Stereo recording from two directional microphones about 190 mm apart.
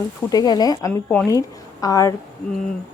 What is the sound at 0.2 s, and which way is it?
A woman's voice, 20° left (ahead or behind).